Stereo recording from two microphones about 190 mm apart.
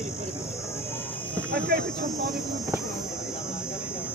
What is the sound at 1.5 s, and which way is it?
Speech, 55° right (ahead or behind).